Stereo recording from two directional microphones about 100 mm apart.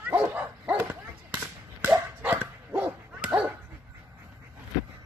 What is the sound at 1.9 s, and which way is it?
Dog, 10° right (ahead or behind).